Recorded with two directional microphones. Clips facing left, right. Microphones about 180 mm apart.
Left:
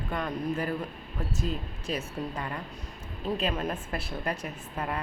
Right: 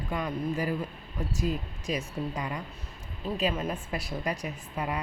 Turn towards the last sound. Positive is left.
turn(degrees=-15)  # may be behind; listen again after turning